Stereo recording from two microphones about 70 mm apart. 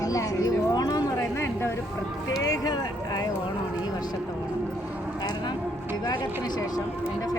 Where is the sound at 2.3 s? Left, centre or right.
Left.